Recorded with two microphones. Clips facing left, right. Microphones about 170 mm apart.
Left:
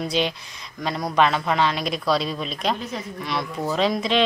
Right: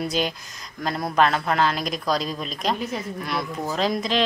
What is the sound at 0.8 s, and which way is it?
Speech, centre (ahead or behind).